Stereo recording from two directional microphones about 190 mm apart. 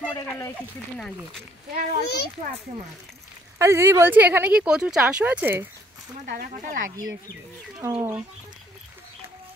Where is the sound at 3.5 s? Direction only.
15° right (ahead or behind).